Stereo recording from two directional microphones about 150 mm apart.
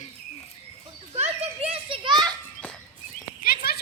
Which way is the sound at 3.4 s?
90° left.